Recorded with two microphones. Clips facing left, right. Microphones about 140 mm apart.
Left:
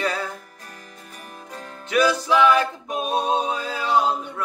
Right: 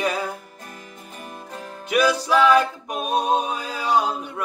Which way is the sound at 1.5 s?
10° right (ahead or behind).